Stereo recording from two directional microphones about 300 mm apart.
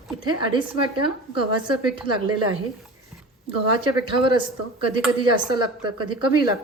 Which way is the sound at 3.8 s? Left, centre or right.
Centre.